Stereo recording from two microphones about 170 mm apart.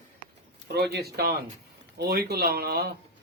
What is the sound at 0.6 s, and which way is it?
A man's voice, 75° right (ahead or behind).